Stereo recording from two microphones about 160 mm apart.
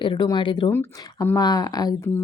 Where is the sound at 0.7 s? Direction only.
20° left (ahead or behind).